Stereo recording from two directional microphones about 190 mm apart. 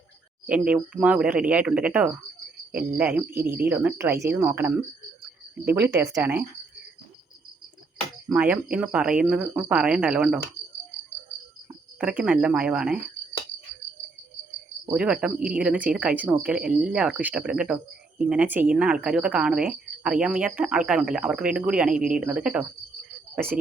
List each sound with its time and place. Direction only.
0.4 s speech: 5° right (ahead or behind)
8.3 s speech: 5° right (ahead or behind)
11.9 s speech: 5° right (ahead or behind)
14.8 s speech: 5° right (ahead or behind)
21.9 s speech: 45° right (ahead or behind)
22.2 s speech: 5° right (ahead or behind)